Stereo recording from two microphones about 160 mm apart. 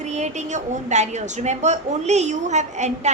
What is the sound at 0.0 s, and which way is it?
A woman's voice, 45° right (ahead or behind).